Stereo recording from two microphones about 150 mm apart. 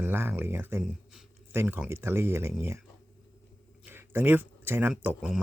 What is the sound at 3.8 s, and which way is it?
Speech, 15° right (ahead or behind).